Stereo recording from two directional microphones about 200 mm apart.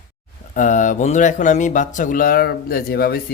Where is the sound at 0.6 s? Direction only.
40° left (ahead or behind).